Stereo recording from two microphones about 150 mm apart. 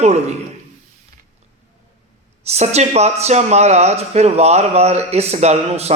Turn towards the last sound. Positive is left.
turn(degrees=-45)  # may be behind; listen again after turning